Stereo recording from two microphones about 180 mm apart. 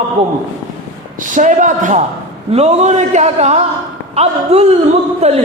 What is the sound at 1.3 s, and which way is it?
A man's voice, 45° right (ahead or behind).